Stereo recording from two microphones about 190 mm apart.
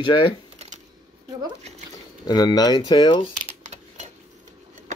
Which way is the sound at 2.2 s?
20° left (ahead or behind).